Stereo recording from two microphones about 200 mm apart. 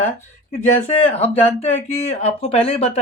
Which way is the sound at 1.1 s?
30° left (ahead or behind).